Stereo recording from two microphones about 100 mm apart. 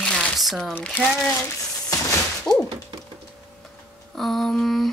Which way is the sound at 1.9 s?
35° left (ahead or behind).